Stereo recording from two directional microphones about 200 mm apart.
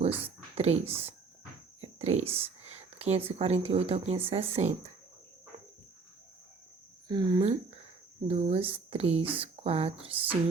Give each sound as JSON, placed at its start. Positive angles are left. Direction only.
{"t": 0.3, "sound": "a sound", "side_deg": -30}
{"t": 1.8, "sound": "speech", "side_deg": -35}
{"t": 7.1, "sound": "speech", "side_deg": -20}